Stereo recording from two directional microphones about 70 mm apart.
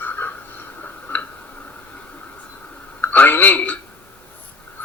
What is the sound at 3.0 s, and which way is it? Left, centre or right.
Speech, left.